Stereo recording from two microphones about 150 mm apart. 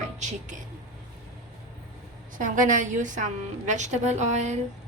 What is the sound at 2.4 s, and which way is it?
A woman's voice, 60° right (ahead or behind).